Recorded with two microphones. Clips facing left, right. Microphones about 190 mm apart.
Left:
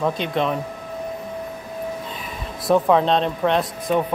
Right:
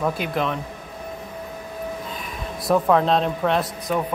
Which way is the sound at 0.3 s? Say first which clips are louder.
Left 2 dB; centre (ahead or behind).